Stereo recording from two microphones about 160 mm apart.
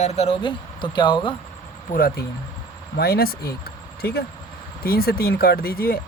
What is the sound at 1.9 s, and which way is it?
Speech, 65° left (ahead or behind).